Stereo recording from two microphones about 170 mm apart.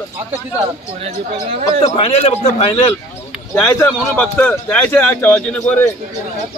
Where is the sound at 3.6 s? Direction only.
10° left (ahead or behind).